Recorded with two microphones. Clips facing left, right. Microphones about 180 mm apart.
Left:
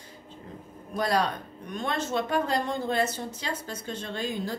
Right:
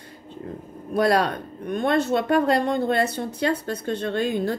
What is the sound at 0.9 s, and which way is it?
Speech, 60° right (ahead or behind).